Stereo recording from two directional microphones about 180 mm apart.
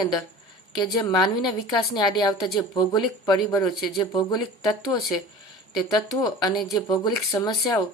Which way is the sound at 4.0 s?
25° left (ahead or behind).